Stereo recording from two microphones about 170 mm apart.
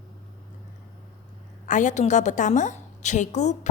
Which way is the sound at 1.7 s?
45° left (ahead or behind).